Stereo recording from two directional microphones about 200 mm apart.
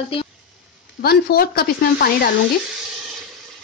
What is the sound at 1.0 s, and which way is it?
A woman's voice, 50° left (ahead or behind).